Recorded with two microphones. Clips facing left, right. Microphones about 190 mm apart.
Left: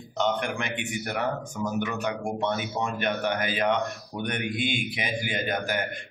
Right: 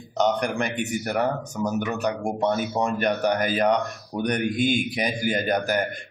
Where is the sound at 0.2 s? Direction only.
40° right (ahead or behind).